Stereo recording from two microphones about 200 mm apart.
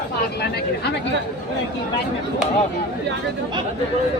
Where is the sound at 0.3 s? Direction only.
55° left (ahead or behind).